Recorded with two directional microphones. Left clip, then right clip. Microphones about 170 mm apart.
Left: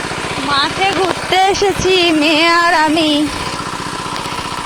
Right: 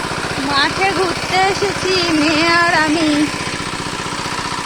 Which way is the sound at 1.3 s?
60° left (ahead or behind).